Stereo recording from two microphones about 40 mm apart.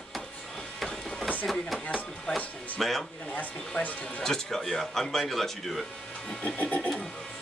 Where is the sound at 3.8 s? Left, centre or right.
Left.